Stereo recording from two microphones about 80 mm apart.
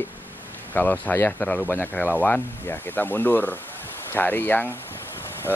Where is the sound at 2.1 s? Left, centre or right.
Left.